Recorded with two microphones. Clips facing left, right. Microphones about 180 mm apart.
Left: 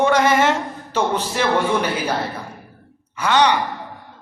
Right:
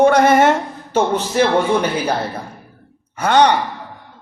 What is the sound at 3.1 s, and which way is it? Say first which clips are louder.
Speech: right 3 dB; 50° right (ahead or behind).